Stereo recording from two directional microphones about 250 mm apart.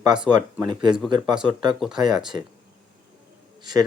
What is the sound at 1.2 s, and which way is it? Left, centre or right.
A man's voice, centre.